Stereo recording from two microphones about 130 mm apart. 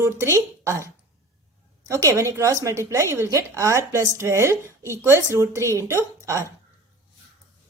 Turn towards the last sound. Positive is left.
turn(degrees=-20)  # may be behind; listen again after turning